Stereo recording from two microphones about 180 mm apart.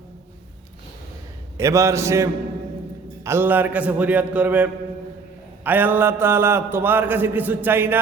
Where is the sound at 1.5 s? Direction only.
15° right (ahead or behind).